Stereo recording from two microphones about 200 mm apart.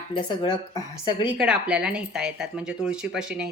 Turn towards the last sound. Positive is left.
turn(degrees=-5)  # may be behind; listen again after turning